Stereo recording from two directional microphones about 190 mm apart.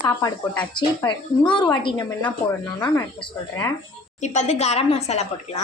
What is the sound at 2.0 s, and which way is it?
Speech, 10° left (ahead or behind).